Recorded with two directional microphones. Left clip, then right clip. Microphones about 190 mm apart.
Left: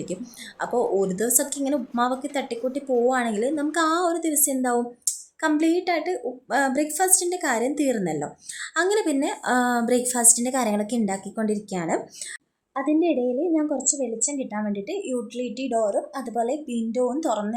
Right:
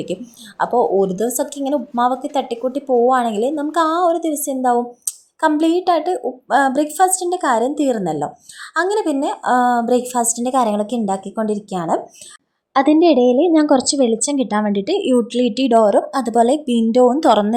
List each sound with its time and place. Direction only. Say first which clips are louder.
0.6 s a woman's voice: right 8 dB; 5° right (ahead or behind)
12.7 s a woman's voice: right 10 dB; 40° right (ahead or behind)